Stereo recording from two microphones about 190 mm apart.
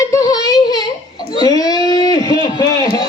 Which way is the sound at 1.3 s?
20° left (ahead or behind).